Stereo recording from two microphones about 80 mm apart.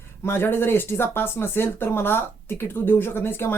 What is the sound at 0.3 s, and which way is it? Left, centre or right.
Speech, left.